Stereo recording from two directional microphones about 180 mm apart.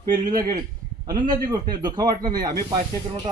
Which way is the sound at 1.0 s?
25° right (ahead or behind).